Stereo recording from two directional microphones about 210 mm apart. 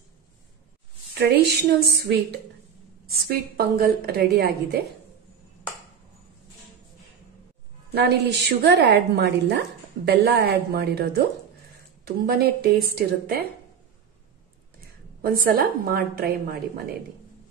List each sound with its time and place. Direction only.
1.1 s a woman's voice: 50° right (ahead or behind)
3.3 s a woman's voice: 45° right (ahead or behind)
7.9 s a woman's voice: 50° right (ahead or behind)
12.3 s a woman's voice: 50° right (ahead or behind)
15.2 s a woman's voice: 45° right (ahead or behind)